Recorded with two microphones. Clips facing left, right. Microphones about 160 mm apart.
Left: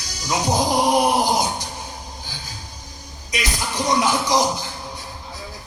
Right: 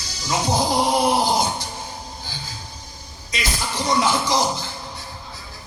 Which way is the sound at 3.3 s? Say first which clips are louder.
Left 1 dB; 15° left (ahead or behind).